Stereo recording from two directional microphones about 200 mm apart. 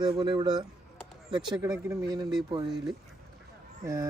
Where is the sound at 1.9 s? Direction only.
20° right (ahead or behind).